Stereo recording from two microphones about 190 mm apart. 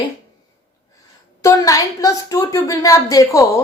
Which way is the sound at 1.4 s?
20° left (ahead or behind).